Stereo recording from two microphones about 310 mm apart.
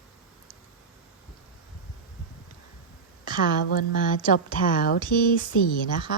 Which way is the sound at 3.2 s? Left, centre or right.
Left.